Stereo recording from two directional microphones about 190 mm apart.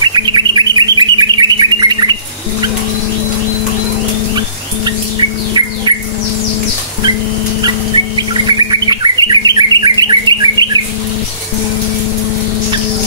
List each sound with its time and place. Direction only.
0.0 s bird: 25° right (ahead or behind)
5.9 s squawk: 25° right (ahead or behind)
8.2 s bird: 25° right (ahead or behind)